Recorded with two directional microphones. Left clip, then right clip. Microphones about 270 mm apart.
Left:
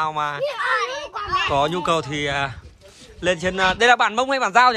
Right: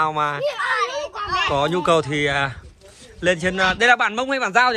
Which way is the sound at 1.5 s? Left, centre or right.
Centre.